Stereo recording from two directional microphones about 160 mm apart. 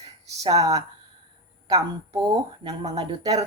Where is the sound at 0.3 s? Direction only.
20° right (ahead or behind).